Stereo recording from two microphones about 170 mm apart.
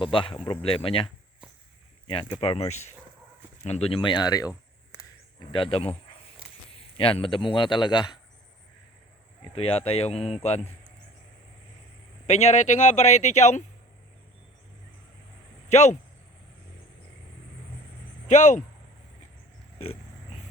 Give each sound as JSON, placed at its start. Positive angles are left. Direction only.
{"t": 0.0, "sound": "speech", "side_deg": 30}
{"t": 2.4, "sound": "a man's voice", "side_deg": 35}
{"t": 9.6, "sound": "speech", "side_deg": 35}
{"t": 12.2, "sound": "speech", "side_deg": 40}
{"t": 15.7, "sound": "speech", "side_deg": 40}
{"t": 18.3, "sound": "speech", "side_deg": 45}